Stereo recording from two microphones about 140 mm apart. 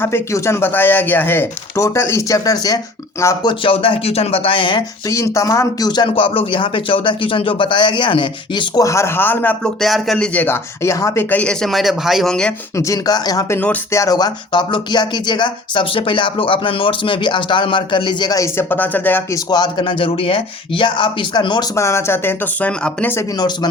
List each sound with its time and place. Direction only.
0.0 s speech: 20° left (ahead or behind)
3.6 s speech: 40° left (ahead or behind)
5.0 s speech: 20° left (ahead or behind)
6.1 s speech: 40° left (ahead or behind)
8.8 s speech: 20° left (ahead or behind)
9.8 s speech: centre (ahead or behind)
10.3 s speech: 15° left (ahead or behind)
12.7 s speech: 25° left (ahead or behind)
19.5 s speech: 30° left (ahead or behind)
21.8 s speech: 20° left (ahead or behind)